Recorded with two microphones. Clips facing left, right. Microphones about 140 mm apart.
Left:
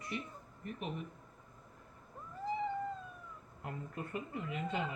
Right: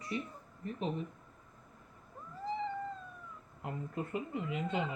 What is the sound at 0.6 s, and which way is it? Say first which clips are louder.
Speech: right 5 dB; 30° right (ahead or behind).